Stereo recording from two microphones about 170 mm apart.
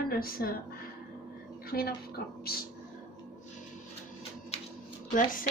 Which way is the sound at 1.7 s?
65° left (ahead or behind).